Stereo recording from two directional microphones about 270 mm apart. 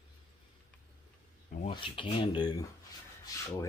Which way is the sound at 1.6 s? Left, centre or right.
Centre.